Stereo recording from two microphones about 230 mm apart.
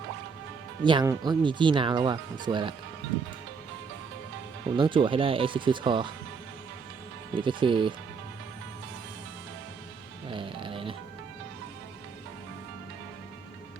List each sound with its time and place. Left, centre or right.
0.9 s speech: centre
4.8 s speech: right
7.3 s speech: right
10.2 s music: right